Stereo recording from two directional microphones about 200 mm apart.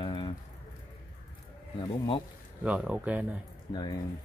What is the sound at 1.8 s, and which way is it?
Speech, 25° left (ahead or behind).